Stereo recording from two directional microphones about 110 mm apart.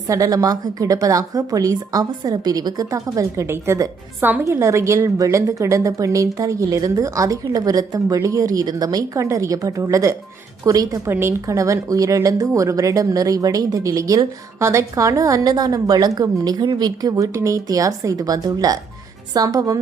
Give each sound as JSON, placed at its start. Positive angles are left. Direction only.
{"t": 0.1, "sound": "speech", "side_deg": -30}